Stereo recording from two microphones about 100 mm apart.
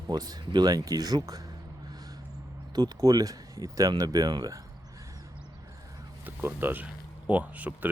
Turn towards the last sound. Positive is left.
turn(degrees=-15)  # may be behind; listen again after turning